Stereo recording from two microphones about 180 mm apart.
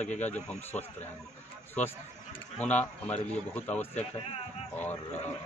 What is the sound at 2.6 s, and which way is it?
A man's voice, 10° left (ahead or behind).